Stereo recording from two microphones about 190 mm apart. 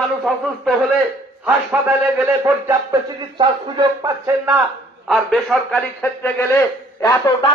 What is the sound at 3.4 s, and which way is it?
Speech, 20° right (ahead or behind).